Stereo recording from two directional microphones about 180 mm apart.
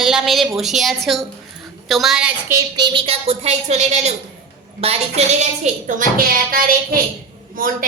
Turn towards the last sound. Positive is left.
turn(degrees=-50)  # may be behind; listen again after turning